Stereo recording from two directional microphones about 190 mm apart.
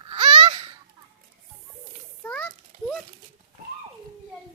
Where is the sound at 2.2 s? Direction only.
5° left (ahead or behind).